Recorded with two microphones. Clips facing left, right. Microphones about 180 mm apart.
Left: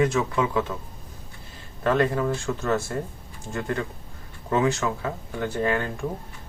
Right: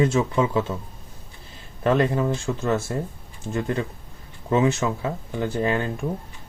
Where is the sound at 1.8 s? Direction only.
25° right (ahead or behind).